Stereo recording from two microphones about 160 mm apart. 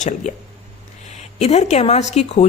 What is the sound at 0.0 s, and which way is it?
Speech, 50° left (ahead or behind).